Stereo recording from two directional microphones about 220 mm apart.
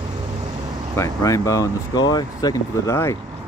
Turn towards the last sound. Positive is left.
turn(degrees=15)  # may be behind; listen again after turning